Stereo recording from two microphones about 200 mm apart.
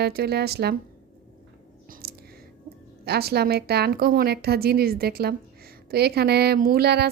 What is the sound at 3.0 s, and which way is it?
Speech, 50° right (ahead or behind).